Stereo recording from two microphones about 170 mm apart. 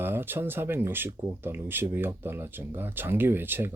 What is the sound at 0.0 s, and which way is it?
Speech, 10° right (ahead or behind).